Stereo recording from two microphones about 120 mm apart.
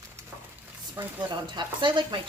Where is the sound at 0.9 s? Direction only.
40° right (ahead or behind).